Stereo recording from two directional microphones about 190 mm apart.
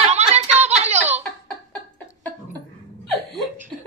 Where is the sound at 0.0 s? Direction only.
35° right (ahead or behind).